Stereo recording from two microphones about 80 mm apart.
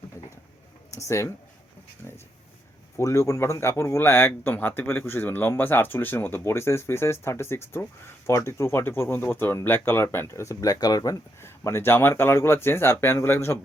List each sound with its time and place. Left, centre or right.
0.9 s speech: left
3.0 s speech: left
11.3 s speech: left